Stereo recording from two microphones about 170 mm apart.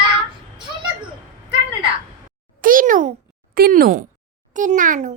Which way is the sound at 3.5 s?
60° right (ahead or behind).